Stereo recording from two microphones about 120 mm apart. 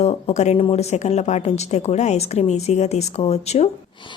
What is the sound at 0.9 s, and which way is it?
A woman's voice, 65° left (ahead or behind).